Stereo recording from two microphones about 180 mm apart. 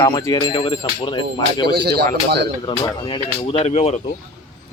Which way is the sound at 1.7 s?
65° right (ahead or behind).